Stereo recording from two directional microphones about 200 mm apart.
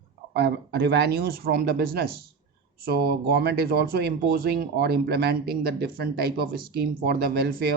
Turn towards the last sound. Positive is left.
turn(degrees=-55)  # may be behind; listen again after turning